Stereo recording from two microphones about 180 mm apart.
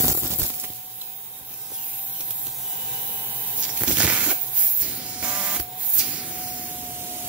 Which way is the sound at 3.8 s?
5° right (ahead or behind).